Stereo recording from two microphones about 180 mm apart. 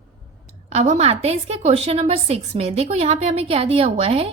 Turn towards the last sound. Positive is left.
turn(degrees=-35)  # may be behind; listen again after turning